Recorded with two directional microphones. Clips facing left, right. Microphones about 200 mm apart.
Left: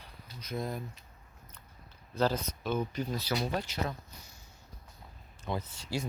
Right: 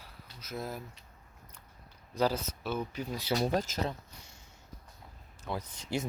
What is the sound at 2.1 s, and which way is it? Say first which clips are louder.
Speech: even; 10° right (ahead or behind).